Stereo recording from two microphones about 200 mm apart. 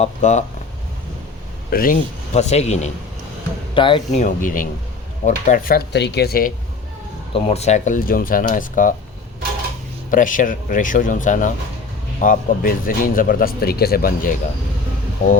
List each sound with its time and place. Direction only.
0.0 s speech: 35° left (ahead or behind)
1.7 s speech: 45° left (ahead or behind); by 4.2 s 25° left (ahead or behind)
4.2 s speech: 40° left (ahead or behind)
7.3 s speech: 30° left (ahead or behind)
10.1 s speech: 40° left (ahead or behind)